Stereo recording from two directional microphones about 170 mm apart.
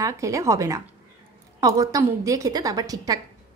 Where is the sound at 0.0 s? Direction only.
20° right (ahead or behind).